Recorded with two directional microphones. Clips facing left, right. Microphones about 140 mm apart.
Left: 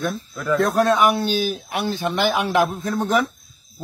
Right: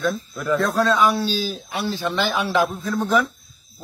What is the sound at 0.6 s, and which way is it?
A man's voice, 20° left (ahead or behind).